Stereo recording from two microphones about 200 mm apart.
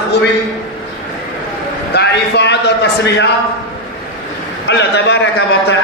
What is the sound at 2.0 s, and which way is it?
A man's voice, 60° left (ahead or behind).